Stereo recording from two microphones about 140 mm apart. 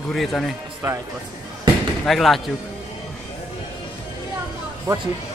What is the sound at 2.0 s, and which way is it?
Speech, centre (ahead or behind).